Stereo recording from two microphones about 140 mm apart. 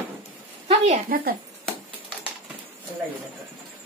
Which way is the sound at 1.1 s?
90° right.